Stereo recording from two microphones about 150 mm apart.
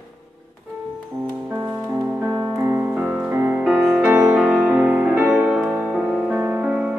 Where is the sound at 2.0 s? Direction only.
15° right (ahead or behind).